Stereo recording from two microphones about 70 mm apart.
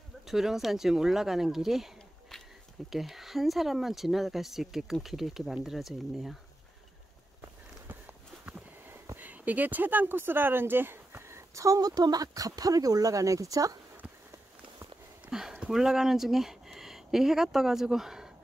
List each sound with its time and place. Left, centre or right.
0.3 s speech: centre
2.9 s speech: centre
7.9 s sniff: right
9.1 s speech: right
15.2 s a sound: centre
15.6 s speech: centre